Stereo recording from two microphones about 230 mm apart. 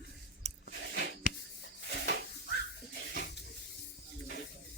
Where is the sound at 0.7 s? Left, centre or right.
Left.